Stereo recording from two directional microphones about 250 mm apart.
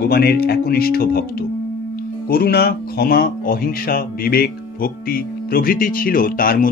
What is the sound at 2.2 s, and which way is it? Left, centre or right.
Speech, left.